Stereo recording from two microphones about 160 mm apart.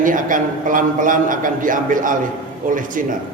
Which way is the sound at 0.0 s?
55° right (ahead or behind).